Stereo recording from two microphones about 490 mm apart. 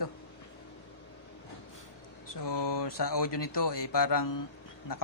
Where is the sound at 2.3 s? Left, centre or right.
Left.